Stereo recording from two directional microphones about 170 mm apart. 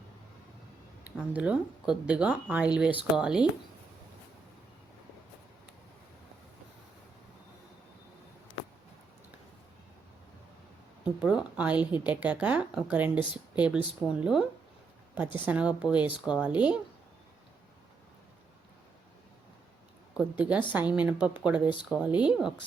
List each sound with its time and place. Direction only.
1.0 s speech: 10° right (ahead or behind)
11.2 s speech: 5° right (ahead or behind)
20.4 s speech: 10° right (ahead or behind)